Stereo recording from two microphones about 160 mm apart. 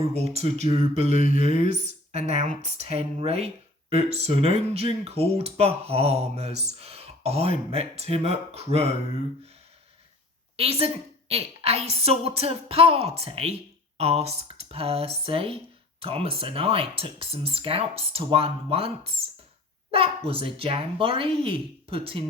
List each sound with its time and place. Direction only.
0.0 s speech: 40° right (ahead or behind)
10.6 s speech: 40° right (ahead or behind)